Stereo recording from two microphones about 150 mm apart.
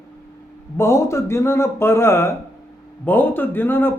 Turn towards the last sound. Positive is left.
turn(degrees=15)  # may be behind; listen again after turning